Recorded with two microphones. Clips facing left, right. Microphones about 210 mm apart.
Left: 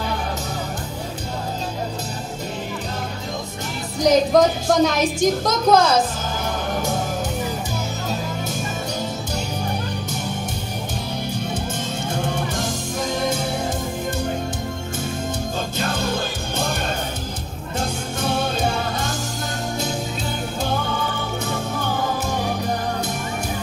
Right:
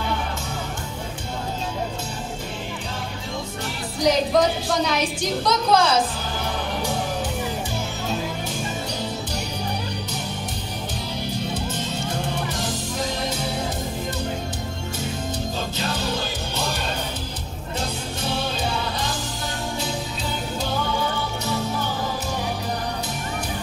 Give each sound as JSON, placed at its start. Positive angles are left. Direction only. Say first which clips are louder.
{"t": 4.0, "sound": "a woman's voice", "louder": "left 4 dB", "side_deg": 45}
{"t": 6.7, "sound": "music", "louder": "left 4 dB", "side_deg": 45}
{"t": 12.5, "sound": "music", "louder": "left 2 dB", "side_deg": 50}
{"t": 15.8, "sound": "music", "louder": "left 3 dB", "side_deg": 50}
{"t": 17.7, "sound": "music", "louder": "left 3 dB", "side_deg": 50}